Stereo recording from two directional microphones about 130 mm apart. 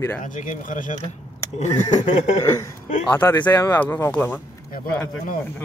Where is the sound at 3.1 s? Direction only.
15° left (ahead or behind).